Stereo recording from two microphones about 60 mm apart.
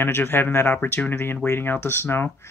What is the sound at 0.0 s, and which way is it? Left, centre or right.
Speech, left.